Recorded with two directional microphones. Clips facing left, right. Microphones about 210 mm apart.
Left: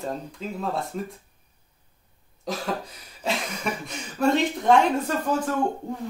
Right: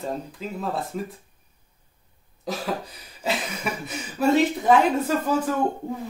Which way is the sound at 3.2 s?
5° right (ahead or behind).